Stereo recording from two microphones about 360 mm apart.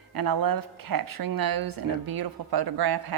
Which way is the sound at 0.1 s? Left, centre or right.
Right.